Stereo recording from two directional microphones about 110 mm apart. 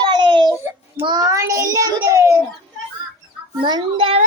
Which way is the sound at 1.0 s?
40° right (ahead or behind).